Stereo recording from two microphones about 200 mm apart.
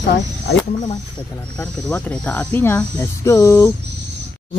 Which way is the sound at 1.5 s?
5° left (ahead or behind).